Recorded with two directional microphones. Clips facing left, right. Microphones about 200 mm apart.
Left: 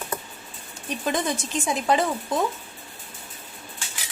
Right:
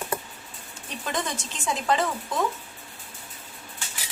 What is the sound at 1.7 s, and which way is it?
Speech, 10° left (ahead or behind).